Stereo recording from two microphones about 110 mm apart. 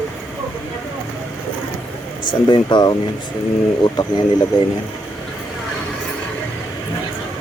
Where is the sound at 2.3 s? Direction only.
45° left (ahead or behind).